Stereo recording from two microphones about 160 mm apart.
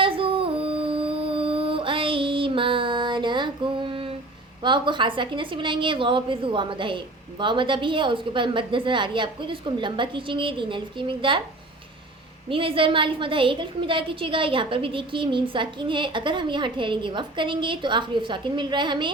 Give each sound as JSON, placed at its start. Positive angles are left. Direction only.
{"t": 0.0, "sound": "humming", "side_deg": -35}
{"t": 4.6, "sound": "a woman's voice", "side_deg": -30}
{"t": 12.5, "sound": "a woman's voice", "side_deg": -35}